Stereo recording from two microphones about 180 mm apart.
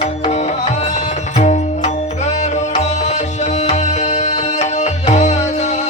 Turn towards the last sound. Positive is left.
turn(degrees=40)  # may be behind; listen again after turning